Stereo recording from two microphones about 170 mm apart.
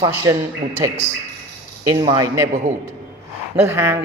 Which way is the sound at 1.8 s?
25° right (ahead or behind).